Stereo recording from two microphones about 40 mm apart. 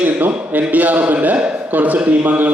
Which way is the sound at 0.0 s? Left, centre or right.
Right.